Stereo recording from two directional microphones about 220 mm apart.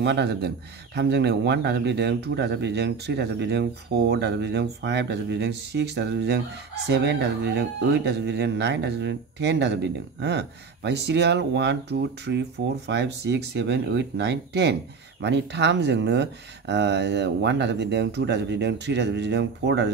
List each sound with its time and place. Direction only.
0.0 s speech: 50° right (ahead or behind)